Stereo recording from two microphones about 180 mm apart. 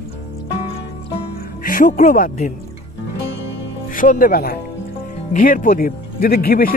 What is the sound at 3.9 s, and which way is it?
Speech, 50° left (ahead or behind).